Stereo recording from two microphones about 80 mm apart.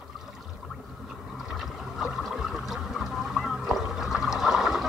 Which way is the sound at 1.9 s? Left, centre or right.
Centre.